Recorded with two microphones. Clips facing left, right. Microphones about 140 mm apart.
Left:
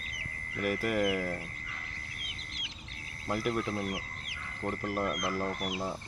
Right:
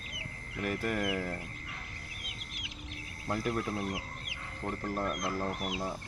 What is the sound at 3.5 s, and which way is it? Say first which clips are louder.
Speech: left 1 dB; 10° right (ahead or behind).